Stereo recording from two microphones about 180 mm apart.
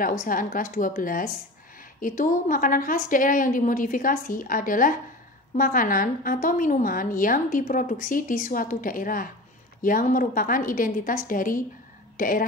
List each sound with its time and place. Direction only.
0.0 s a woman's voice: 50° left (ahead or behind)